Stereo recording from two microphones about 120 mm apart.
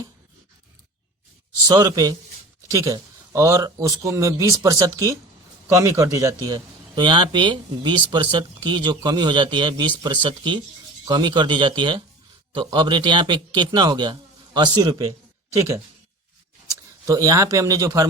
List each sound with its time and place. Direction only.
1.6 s a man's voice: 35° right (ahead or behind)
17.1 s a man's voice: 30° right (ahead or behind)